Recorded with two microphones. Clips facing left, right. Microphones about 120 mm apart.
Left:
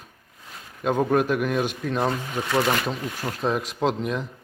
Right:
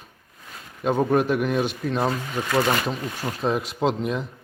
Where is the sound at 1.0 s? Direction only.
Centre (ahead or behind).